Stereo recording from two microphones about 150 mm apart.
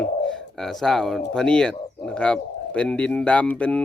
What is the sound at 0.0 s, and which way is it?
Speech, 5° left (ahead or behind).